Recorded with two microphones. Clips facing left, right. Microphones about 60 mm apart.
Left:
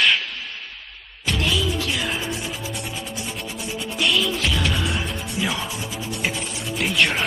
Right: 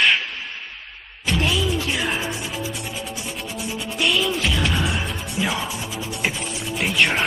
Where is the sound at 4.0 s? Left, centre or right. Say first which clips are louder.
Right 1 dB; centre.